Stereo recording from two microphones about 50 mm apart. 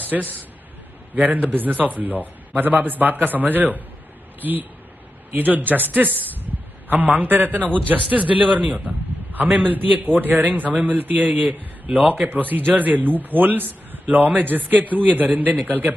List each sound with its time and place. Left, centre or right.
1.1 s a man's voice: right